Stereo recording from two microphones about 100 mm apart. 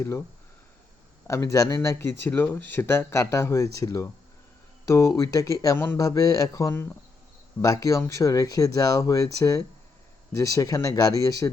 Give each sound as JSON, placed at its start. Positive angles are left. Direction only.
{"t": 1.3, "sound": "speech", "side_deg": 30}
{"t": 5.7, "sound": "speech", "side_deg": 20}
{"t": 6.0, "sound": "speech", "side_deg": 35}